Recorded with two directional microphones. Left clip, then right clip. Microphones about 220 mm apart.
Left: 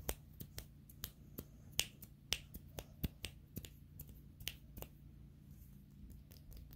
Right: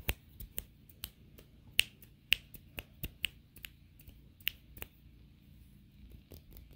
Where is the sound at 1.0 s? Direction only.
20° right (ahead or behind).